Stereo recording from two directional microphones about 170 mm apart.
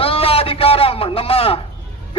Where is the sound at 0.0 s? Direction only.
35° left (ahead or behind).